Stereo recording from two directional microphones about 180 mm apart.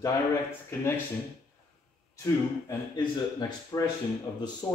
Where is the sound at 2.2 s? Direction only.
20° left (ahead or behind).